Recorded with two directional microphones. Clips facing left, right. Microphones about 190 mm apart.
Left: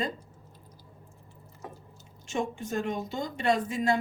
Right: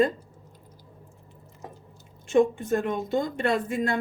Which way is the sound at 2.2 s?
55° right (ahead or behind).